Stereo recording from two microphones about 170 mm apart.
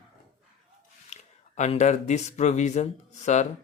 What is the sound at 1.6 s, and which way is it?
Speech, 45° left (ahead or behind).